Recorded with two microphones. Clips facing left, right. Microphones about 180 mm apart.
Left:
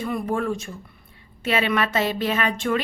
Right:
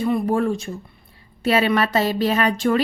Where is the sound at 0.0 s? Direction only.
35° right (ahead or behind).